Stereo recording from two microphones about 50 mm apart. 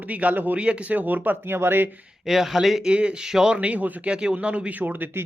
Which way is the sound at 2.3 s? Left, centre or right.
Centre.